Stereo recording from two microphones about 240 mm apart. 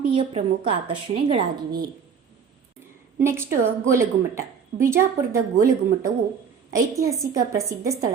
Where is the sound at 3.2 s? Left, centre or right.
Centre.